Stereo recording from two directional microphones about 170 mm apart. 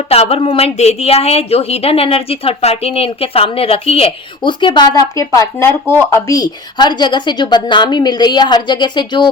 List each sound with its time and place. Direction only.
0.1 s a woman's voice: 35° left (ahead or behind)